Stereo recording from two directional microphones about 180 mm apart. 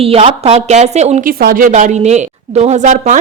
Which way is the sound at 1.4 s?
55° right (ahead or behind).